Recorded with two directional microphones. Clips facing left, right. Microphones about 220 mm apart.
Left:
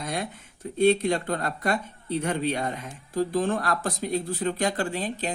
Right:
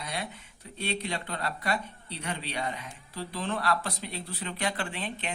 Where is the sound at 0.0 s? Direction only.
50° left (ahead or behind).